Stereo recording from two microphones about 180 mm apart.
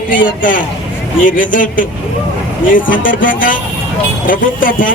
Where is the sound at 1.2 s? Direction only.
50° left (ahead or behind).